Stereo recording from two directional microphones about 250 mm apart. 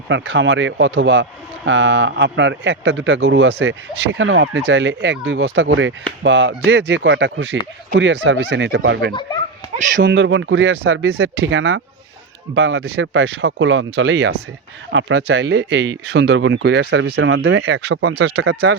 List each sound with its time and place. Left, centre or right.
0.1 s speech: right